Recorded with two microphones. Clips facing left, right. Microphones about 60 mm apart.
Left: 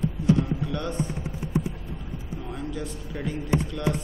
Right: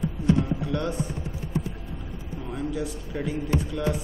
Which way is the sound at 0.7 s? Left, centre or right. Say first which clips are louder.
Right 3 dB; centre.